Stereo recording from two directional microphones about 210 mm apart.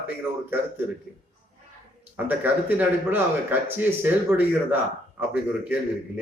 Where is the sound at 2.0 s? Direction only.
10° right (ahead or behind).